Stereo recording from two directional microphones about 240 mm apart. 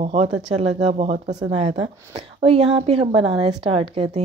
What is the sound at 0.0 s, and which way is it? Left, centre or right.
Speech, right.